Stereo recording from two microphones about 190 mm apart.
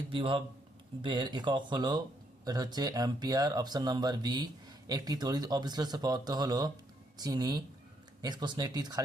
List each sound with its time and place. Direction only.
0.1 s speech: 25° right (ahead or behind)